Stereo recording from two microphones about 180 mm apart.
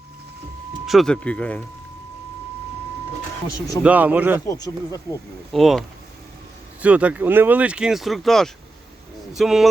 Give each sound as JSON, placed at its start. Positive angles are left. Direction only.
{"t": 0.9, "sound": "speech", "side_deg": 0}
{"t": 3.8, "sound": "speech", "side_deg": -10}
{"t": 4.4, "sound": "speech", "side_deg": 20}
{"t": 5.5, "sound": "speech", "side_deg": 0}
{"t": 6.8, "sound": "speech", "side_deg": -5}